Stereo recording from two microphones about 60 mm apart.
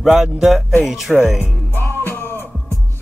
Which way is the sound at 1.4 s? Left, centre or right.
Left.